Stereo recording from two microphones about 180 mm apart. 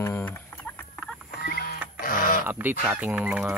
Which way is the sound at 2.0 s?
50° left (ahead or behind).